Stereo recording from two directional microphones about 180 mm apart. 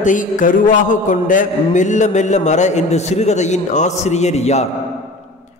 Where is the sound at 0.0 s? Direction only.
45° left (ahead or behind).